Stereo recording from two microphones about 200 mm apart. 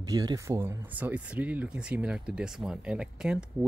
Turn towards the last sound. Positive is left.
turn(degrees=-5)  # may be behind; listen again after turning